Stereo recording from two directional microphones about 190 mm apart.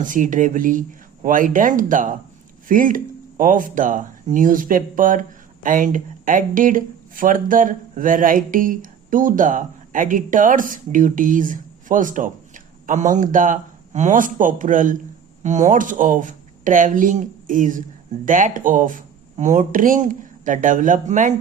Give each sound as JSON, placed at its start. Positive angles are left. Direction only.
{"t": 0.0, "sound": "speech", "side_deg": -45}